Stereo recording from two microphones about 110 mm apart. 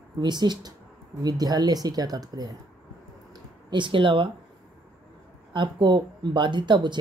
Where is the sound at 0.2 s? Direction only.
40° right (ahead or behind).